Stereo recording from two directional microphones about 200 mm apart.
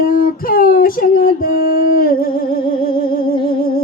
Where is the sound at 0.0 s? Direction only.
45° left (ahead or behind).